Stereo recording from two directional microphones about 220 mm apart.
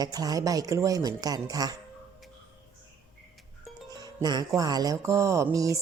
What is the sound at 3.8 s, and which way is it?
Music, 15° right (ahead or behind).